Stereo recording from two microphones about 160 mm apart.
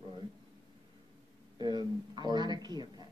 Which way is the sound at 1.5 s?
25° right (ahead or behind).